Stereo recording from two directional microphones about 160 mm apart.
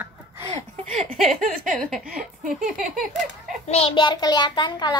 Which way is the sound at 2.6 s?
55° right (ahead or behind).